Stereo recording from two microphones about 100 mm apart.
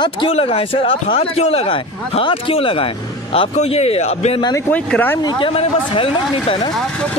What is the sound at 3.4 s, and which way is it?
A man's voice, 90° left.